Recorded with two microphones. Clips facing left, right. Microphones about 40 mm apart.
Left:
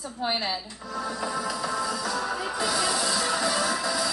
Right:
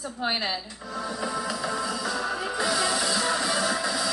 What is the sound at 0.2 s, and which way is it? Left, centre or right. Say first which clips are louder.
Speech: even; right.